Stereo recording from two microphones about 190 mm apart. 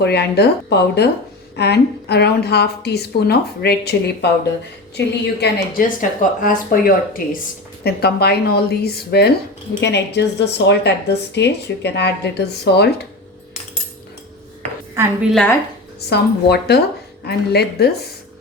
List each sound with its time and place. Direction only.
0.0 s speech: 60° left (ahead or behind)
14.9 s a woman's voice: 5° right (ahead or behind)
16.0 s speech: 60° left (ahead or behind)